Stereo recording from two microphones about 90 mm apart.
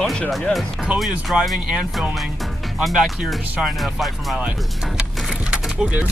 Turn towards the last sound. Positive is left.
turn(degrees=-15)  # may be behind; listen again after turning